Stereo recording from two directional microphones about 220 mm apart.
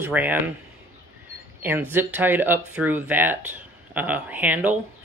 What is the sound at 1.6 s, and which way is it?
Speech, 10° right (ahead or behind).